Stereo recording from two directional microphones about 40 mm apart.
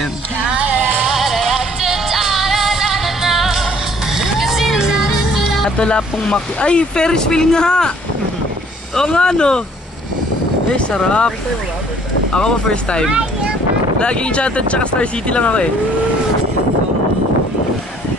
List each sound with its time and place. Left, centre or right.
0.5 s music: right
1.0 s music: centre
5.8 s speech: left
8.9 s speech: centre
11.1 s speech: left
13.9 s speech: left